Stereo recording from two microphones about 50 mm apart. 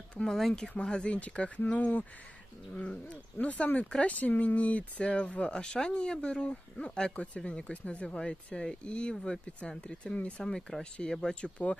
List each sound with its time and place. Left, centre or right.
0.1 s speech: centre
0.7 s speech: left